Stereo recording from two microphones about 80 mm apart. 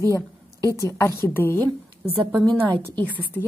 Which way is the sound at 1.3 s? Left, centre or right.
Left.